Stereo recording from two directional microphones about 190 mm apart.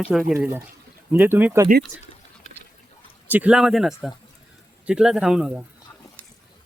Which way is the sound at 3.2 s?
10° right (ahead or behind).